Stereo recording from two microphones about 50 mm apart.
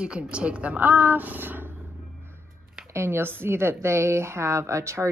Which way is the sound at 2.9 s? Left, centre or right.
Right.